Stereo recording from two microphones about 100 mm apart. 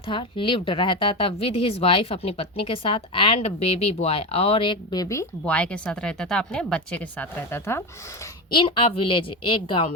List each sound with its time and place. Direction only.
0.1 s speech: 55° left (ahead or behind)
5.5 s speech: 10° left (ahead or behind)
8.4 s speech: 55° left (ahead or behind)